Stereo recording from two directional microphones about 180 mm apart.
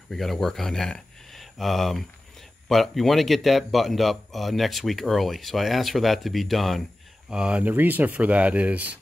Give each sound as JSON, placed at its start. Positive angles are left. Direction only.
{"t": 0.1, "sound": "speech", "side_deg": 0}